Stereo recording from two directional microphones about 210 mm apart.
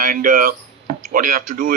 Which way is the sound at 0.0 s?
40° right (ahead or behind).